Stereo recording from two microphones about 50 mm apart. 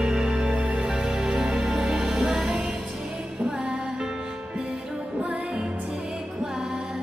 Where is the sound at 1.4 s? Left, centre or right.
Centre.